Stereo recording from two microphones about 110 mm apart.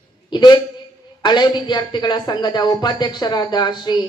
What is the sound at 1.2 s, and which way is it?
A man's voice, 45° left (ahead or behind).